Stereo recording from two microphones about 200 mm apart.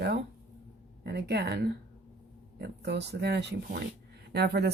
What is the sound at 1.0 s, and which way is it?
Speech, 55° right (ahead or behind).